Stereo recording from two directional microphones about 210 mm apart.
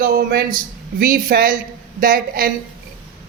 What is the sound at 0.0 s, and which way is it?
Speech, 45° right (ahead or behind).